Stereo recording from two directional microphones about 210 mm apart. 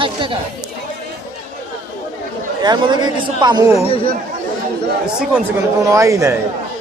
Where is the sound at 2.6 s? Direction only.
20° right (ahead or behind).